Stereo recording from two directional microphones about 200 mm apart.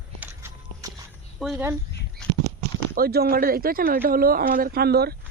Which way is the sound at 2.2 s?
5° left (ahead or behind).